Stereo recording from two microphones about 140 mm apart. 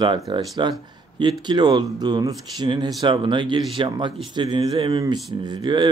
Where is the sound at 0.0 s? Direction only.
30° right (ahead or behind).